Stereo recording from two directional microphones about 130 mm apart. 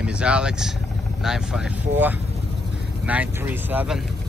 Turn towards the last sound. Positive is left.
turn(degrees=-10)  # may be behind; listen again after turning